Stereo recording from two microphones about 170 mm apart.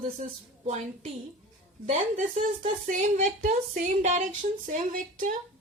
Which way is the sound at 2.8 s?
50° right (ahead or behind).